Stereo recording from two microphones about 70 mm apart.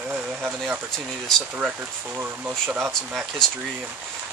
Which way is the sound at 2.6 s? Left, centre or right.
Right.